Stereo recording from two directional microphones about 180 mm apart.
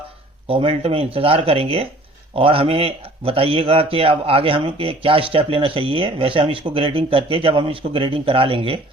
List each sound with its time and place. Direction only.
0.4 s speech: 30° right (ahead or behind)